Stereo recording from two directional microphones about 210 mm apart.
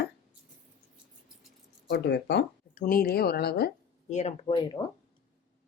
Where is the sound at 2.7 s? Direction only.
45° left (ahead or behind).